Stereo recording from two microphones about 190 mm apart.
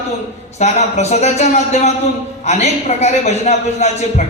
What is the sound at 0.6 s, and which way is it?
A man's voice, 35° left (ahead or behind).